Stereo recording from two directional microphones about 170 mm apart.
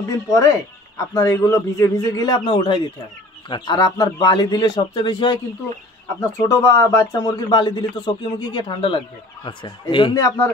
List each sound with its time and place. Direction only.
0.3 s a man's voice: 20° left (ahead or behind)
6.4 s a man's voice: 20° left (ahead or behind)